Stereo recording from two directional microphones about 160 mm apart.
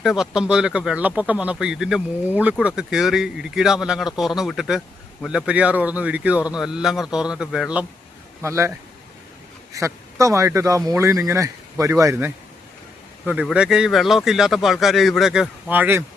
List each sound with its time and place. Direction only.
0.0 s speech: centre (ahead or behind)
8.4 s speech: 15° right (ahead or behind)
9.7 s a man's voice: 20° right (ahead or behind)